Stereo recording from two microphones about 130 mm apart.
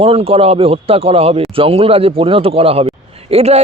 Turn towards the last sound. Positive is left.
turn(degrees=-55)  # may be behind; listen again after turning